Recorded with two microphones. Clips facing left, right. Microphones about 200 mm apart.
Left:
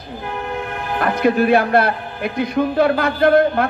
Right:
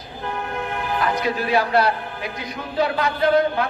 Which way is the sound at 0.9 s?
55° left (ahead or behind).